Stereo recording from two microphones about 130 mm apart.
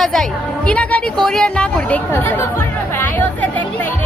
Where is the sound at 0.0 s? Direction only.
5° left (ahead or behind).